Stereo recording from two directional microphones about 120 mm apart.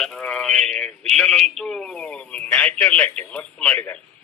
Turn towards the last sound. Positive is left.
turn(degrees=10)  # may be behind; listen again after turning